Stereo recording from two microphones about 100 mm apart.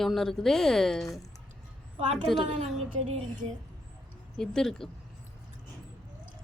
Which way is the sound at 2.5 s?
90° right.